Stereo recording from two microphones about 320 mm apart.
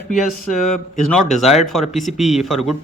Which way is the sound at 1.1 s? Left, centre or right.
Centre.